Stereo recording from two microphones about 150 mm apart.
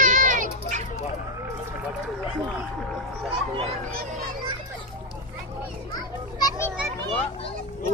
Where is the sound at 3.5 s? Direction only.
40° right (ahead or behind).